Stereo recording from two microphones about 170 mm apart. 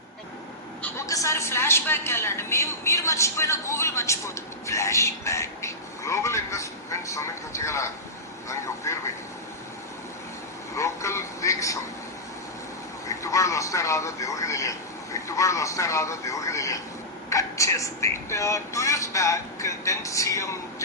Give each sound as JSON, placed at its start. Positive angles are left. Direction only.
{"t": 0.8, "sound": "a woman's voice", "side_deg": 15}
{"t": 10.8, "sound": "a woman's voice", "side_deg": 15}
{"t": 13.1, "sound": "a woman's voice", "side_deg": 20}